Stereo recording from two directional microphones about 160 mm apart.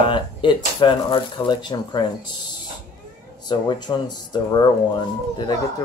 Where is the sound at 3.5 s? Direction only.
25° left (ahead or behind).